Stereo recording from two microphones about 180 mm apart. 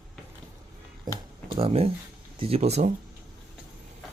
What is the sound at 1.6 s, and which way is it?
Speech, 30° right (ahead or behind).